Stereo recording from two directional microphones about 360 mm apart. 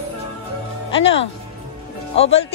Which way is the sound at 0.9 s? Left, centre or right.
Left.